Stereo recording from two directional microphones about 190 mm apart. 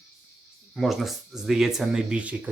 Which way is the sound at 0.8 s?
Centre (ahead or behind).